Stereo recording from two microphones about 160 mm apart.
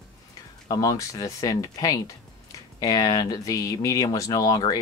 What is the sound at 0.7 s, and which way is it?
Speech, 20° left (ahead or behind).